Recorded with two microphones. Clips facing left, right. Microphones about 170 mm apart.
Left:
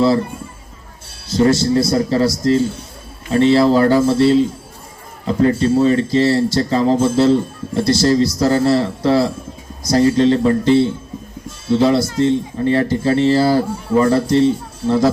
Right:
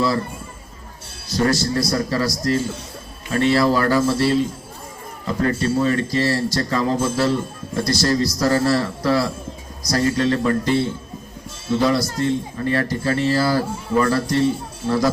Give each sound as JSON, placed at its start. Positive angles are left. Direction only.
{"t": 1.3, "sound": "speech", "side_deg": 25}